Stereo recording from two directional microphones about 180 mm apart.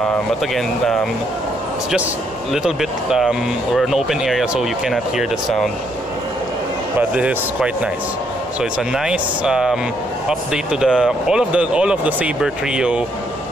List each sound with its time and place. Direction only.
0.6 s speech: centre (ahead or behind)
2.5 s speech: centre (ahead or behind)
7.0 s speech: 5° right (ahead or behind)
8.9 s speech: 5° right (ahead or behind)